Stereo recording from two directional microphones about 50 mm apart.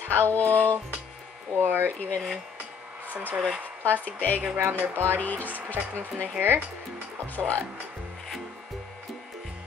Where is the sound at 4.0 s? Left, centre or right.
Left.